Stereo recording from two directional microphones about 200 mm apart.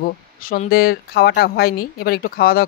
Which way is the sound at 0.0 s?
45° left (ahead or behind).